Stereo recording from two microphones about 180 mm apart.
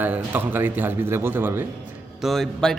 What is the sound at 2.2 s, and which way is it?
Speech, centre (ahead or behind).